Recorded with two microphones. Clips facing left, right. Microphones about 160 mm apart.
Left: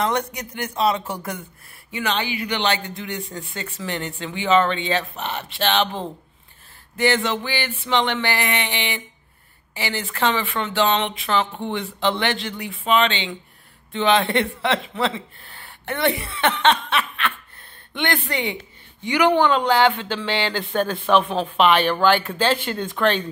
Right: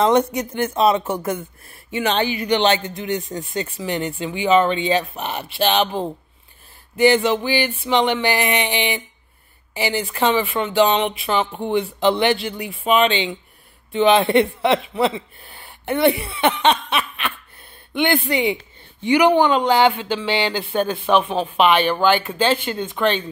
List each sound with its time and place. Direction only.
0.0 s speech: 25° right (ahead or behind)
2.1 s speech: 40° right (ahead or behind)
2.6 s speech: 20° right (ahead or behind); by 23.2 s centre (ahead or behind)